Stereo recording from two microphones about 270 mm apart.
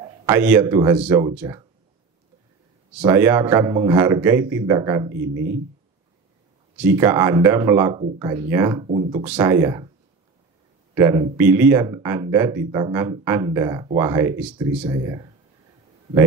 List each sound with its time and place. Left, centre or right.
0.0 s speech: centre
3.0 s speech: centre
5.2 s speech: right
6.8 s speech: centre
8.8 s speech: right
9.2 s speech: centre
11.0 s speech: centre